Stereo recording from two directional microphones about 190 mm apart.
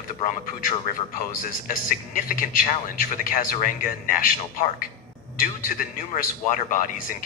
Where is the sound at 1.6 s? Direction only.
45° left (ahead or behind).